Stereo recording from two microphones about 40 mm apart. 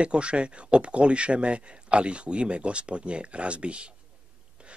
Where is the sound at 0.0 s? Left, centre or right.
Right.